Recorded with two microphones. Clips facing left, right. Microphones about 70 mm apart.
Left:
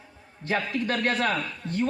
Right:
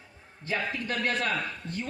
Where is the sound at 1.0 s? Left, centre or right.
Left.